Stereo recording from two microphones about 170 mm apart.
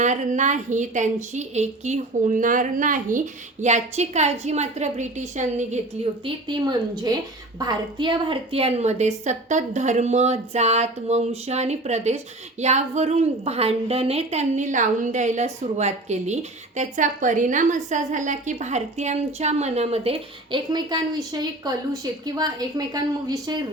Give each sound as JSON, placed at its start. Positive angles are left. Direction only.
{"t": 0.0, "sound": "a woman's voice", "side_deg": -45}
{"t": 6.2, "sound": "a woman's voice", "side_deg": -25}